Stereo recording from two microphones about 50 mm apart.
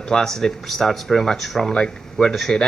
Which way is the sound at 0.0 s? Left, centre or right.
Centre.